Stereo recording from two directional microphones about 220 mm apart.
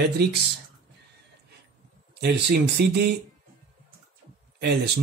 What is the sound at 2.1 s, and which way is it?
Speech, 50° right (ahead or behind).